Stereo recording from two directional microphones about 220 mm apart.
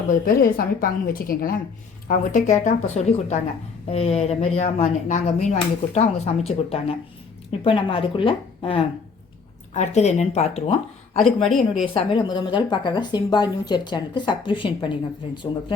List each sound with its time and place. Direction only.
0.5 s a woman's voice: 40° left (ahead or behind)
11.5 s a woman's voice: centre (ahead or behind)
11.9 s a woman's voice: 20° left (ahead or behind)